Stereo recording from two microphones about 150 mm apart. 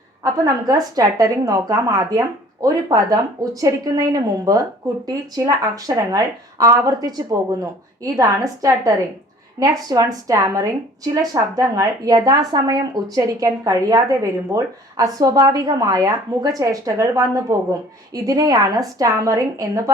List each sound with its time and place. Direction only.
0.2 s a woman's voice: 25° right (ahead or behind)